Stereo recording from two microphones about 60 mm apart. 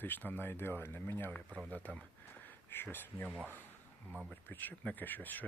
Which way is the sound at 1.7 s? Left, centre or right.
Left.